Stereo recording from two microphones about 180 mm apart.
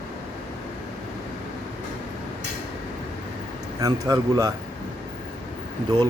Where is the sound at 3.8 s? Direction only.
20° right (ahead or behind).